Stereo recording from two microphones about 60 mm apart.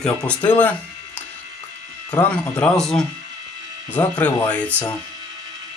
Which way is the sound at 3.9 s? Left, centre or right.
Left.